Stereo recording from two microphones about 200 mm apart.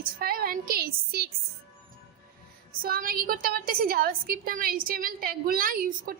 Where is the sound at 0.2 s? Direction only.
50° right (ahead or behind).